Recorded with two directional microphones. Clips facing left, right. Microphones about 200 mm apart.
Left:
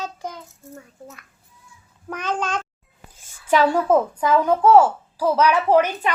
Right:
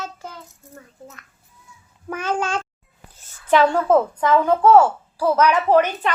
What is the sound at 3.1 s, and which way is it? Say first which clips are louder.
A woman's voice: right 2 dB; 10° left (ahead or behind).